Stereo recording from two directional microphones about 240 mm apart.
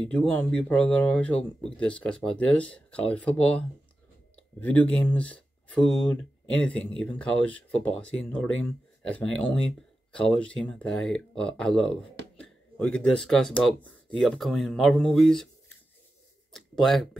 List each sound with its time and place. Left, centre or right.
0.0 s speech: centre
16.5 s speech: centre